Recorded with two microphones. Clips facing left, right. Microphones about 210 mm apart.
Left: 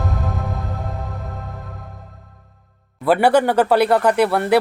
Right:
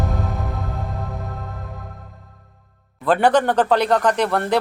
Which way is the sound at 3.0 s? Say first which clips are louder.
Left 2 dB; 10° left (ahead or behind).